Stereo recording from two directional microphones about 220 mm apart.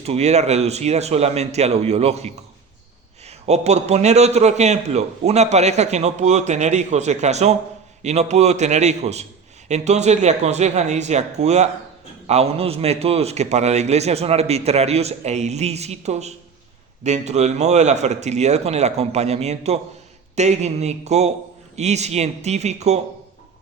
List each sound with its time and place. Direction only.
0.0 s a man's voice: 30° right (ahead or behind)